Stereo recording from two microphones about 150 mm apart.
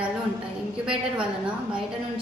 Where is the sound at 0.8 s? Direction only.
5° right (ahead or behind).